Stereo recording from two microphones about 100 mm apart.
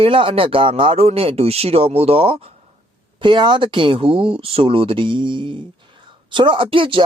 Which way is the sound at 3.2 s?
50° right (ahead or behind).